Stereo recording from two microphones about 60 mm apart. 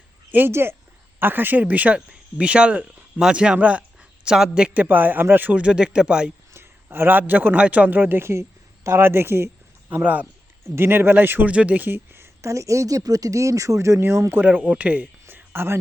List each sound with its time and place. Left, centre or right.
0.3 s speech: right
0.5 s speech: right; by 4.4 s centre
4.7 s speech: right
5.6 s speech: centre
6.5 s a man's voice: right
7.9 s speech: right
8.2 s speech: right
9.9 s speech: right
10.8 s speech: right
11.5 s speech: right
11.9 s speech: right
14.8 s speech: right
15.3 s a sound: right